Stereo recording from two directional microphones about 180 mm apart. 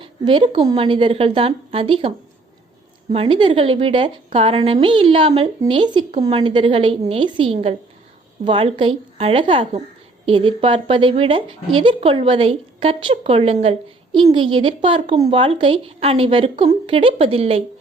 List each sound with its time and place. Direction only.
0.0 s a woman's voice: 25° right (ahead or behind)